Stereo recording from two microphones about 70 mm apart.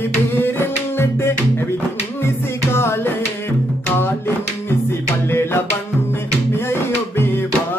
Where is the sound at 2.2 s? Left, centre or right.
Left.